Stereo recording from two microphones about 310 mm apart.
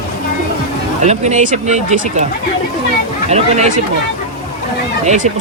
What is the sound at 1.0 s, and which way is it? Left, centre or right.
Speech, right.